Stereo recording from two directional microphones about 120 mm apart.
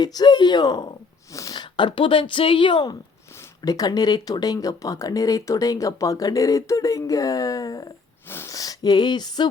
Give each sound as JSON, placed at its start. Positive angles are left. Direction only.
{"t": 0.0, "sound": "a sound", "side_deg": 35}
{"t": 1.5, "sound": "speech", "side_deg": 40}
{"t": 3.6, "sound": "speech", "side_deg": 30}